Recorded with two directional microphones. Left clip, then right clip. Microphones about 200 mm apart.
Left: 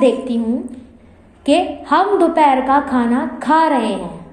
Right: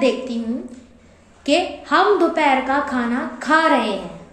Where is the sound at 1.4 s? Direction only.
20° left (ahead or behind).